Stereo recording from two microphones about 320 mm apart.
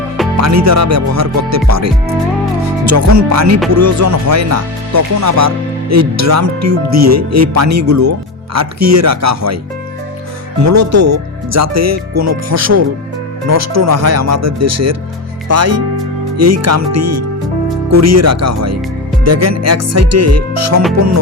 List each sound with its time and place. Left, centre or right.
0.3 s speech: right
10.6 s speech: right